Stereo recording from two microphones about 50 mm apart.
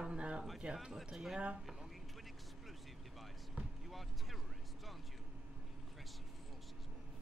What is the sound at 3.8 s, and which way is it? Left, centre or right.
Basketball bounce, centre.